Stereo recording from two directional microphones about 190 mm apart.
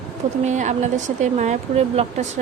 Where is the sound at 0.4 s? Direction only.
40° right (ahead or behind).